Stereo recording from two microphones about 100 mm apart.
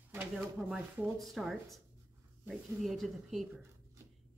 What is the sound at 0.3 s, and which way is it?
Speech, 5° right (ahead or behind).